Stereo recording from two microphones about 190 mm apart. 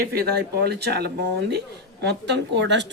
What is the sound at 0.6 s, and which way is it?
Speech, 60° right (ahead or behind).